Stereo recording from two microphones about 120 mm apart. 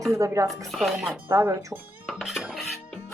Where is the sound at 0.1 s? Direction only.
25° right (ahead or behind).